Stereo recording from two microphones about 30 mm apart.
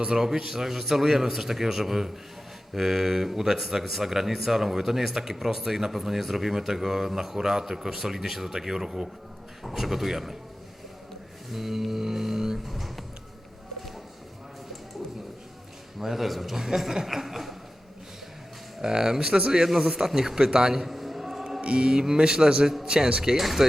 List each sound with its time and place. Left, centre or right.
0.2 s speech: centre
11.5 s music: centre
12.6 s music: centre
16.0 s speech: centre
17.2 s a sound: centre
18.8 s speech: centre
20.8 s a sound: centre
21.6 s speech: right
23.4 s a sound: centre